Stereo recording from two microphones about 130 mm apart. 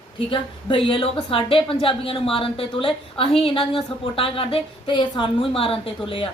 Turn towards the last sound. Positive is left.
turn(degrees=40)  # may be behind; listen again after turning